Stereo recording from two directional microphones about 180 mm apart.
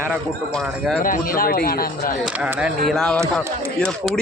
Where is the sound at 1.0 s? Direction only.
50° left (ahead or behind).